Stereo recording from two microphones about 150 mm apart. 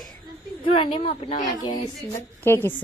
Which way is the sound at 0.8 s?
35° left (ahead or behind).